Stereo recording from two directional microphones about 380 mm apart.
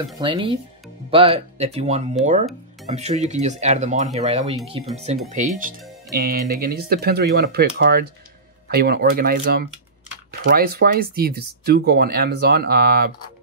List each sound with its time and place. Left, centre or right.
0.0 s speech: centre